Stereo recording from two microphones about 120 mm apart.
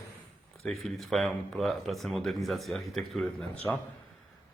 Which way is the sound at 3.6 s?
30° left (ahead or behind).